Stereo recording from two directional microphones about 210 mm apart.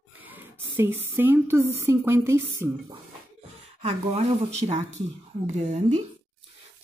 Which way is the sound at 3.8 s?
30° right (ahead or behind).